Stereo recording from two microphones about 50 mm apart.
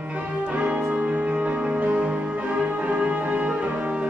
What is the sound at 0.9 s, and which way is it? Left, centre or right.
Music, right.